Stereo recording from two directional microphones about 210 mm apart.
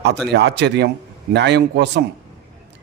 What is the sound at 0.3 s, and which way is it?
A man's voice, 55° right (ahead or behind).